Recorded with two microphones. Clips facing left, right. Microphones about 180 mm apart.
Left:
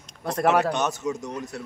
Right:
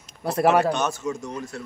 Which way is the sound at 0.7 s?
20° left (ahead or behind).